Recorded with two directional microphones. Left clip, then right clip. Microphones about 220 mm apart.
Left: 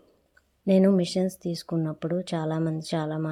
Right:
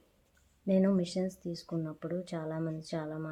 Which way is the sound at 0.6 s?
40° left (ahead or behind).